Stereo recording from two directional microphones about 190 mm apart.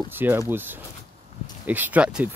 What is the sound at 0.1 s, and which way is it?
Speech, 10° right (ahead or behind).